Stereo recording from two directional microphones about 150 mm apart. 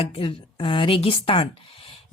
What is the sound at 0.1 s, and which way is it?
Speech, 40° left (ahead or behind).